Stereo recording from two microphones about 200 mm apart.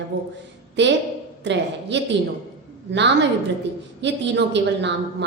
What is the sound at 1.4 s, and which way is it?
A woman's voice, 60° right (ahead or behind).